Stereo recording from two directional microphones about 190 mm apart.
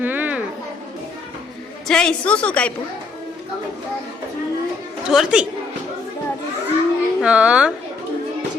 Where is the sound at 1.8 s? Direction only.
5° left (ahead or behind).